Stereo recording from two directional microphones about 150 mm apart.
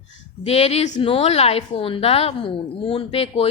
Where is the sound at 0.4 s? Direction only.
45° left (ahead or behind).